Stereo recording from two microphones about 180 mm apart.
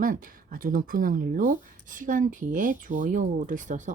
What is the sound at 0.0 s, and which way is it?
Speech, 50° right (ahead or behind).